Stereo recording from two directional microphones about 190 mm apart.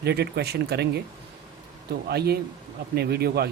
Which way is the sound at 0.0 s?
60° right (ahead or behind).